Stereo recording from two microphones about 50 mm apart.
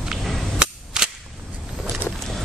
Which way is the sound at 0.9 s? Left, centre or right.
Centre.